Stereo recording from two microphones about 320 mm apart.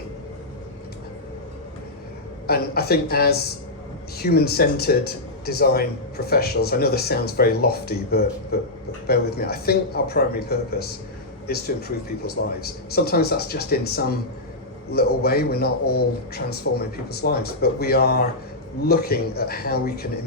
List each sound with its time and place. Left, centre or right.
2.5 s a man's voice: left